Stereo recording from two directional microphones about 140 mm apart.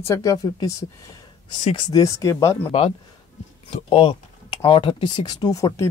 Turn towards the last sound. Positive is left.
turn(degrees=25)  # may be behind; listen again after turning